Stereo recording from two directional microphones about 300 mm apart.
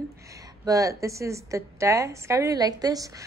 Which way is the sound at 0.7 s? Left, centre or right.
Centre.